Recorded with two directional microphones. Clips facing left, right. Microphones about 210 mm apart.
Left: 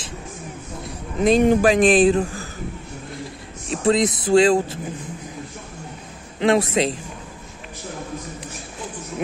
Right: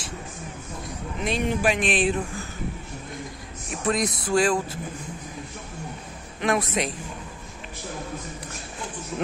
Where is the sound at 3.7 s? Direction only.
25° left (ahead or behind).